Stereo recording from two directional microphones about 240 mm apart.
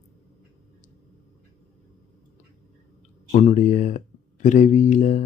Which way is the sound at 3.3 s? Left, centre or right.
Left.